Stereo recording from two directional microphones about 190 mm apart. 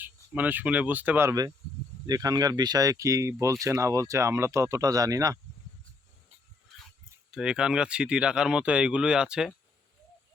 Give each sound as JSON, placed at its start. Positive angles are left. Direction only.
{"t": 0.0, "sound": "speech", "side_deg": -10}
{"t": 7.3, "sound": "speech", "side_deg": -5}